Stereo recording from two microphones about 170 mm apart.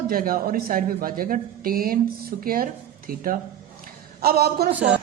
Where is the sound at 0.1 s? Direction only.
55° right (ahead or behind).